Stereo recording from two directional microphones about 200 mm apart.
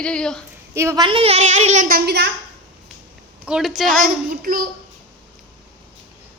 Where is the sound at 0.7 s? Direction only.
15° right (ahead or behind); by 2.0 s 40° right (ahead or behind).